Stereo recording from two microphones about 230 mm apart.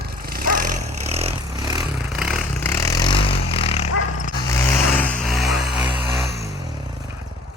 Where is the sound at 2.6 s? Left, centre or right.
Centre.